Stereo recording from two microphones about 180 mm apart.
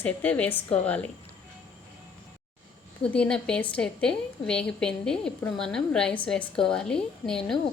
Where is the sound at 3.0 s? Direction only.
5° left (ahead or behind).